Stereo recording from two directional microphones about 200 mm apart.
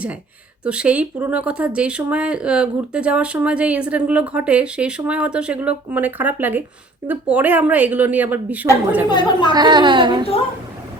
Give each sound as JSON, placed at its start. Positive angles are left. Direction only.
{"t": 0.6, "sound": "a woman's voice", "side_deg": -5}
{"t": 9.0, "sound": "a woman's voice", "side_deg": 20}
{"t": 9.5, "sound": "a woman's voice", "side_deg": -20}